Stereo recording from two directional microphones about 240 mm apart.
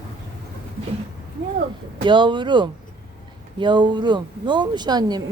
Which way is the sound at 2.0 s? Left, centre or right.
Centre.